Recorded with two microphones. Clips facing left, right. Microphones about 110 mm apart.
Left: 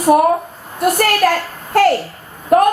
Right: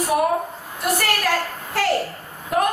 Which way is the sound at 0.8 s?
50° left (ahead or behind).